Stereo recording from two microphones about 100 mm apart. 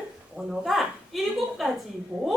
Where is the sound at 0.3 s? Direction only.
Centre (ahead or behind).